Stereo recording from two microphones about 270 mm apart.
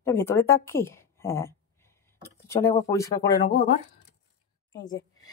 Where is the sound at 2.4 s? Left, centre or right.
Centre.